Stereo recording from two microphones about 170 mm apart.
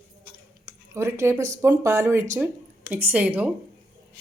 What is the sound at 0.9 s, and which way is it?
Speech, 15° right (ahead or behind).